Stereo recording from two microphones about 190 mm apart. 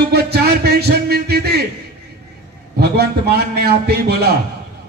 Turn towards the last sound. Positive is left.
turn(degrees=-55)  # may be behind; listen again after turning